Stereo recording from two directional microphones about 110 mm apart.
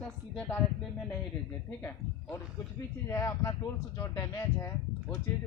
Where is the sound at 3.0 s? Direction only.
25° left (ahead or behind).